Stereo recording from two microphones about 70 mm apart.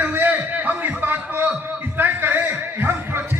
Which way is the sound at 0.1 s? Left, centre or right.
Right.